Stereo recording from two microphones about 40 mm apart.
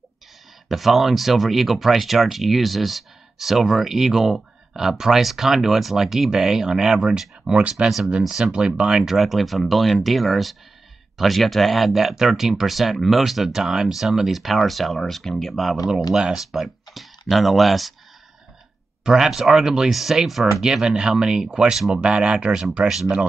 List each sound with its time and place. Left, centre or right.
0.7 s speech: centre; by 9.0 s right
9.0 s speech: centre
19.0 s speech: centre
19.9 s speech: centre
20.6 s speech: right
22.8 s speech: centre